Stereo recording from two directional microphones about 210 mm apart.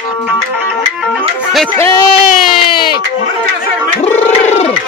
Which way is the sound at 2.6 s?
20° left (ahead or behind).